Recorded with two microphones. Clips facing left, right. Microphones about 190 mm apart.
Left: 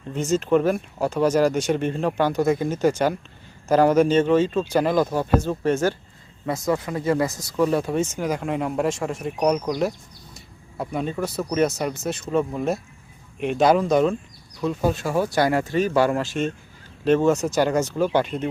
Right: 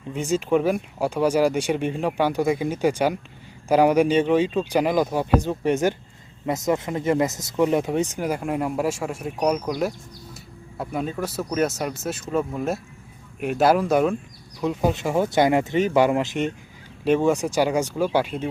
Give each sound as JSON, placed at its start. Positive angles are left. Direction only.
{"t": 0.1, "sound": "speech", "side_deg": -10}